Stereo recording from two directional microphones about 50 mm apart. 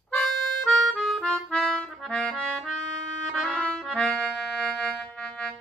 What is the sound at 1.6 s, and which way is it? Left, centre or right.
Music, centre.